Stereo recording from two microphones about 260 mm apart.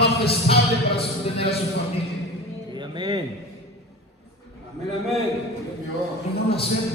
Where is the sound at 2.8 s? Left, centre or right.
Centre.